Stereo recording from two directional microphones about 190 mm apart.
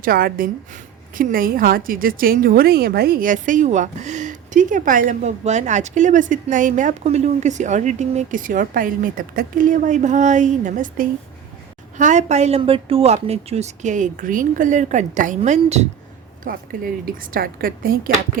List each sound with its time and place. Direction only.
0.0 s a woman's voice: 50° right (ahead or behind)
16.4 s a woman's voice: 50° right (ahead or behind)